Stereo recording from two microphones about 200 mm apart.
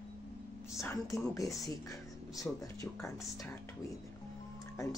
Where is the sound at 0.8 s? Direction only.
15° left (ahead or behind).